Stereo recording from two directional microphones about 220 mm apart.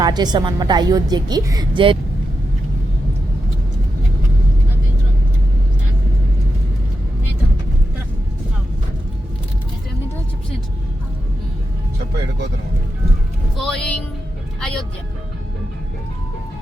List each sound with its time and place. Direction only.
0.0 s a woman's voice: 20° right (ahead or behind)
13.6 s music: 5° left (ahead or behind)
14.6 s speech: centre (ahead or behind)